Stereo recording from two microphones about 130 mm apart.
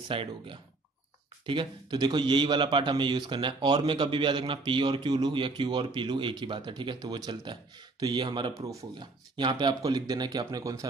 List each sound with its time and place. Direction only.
0.1 s a man's voice: 40° right (ahead or behind)
8.5 s speech: 25° right (ahead or behind)
9.4 s a man's voice: 35° right (ahead or behind)